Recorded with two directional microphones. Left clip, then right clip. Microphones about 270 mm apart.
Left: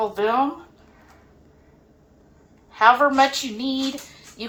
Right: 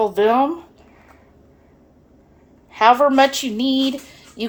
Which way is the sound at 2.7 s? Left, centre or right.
Right.